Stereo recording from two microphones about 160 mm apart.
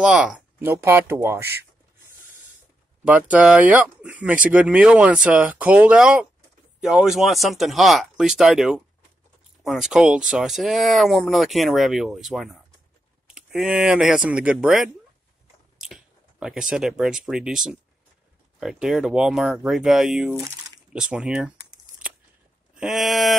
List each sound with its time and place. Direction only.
0.0 s speech: 5° right (ahead or behind)
3.1 s speech: 10° right (ahead or behind)
20.3 s a sound: 20° right (ahead or behind)
20.9 s speech: 5° right (ahead or behind)
22.8 s speech: centre (ahead or behind)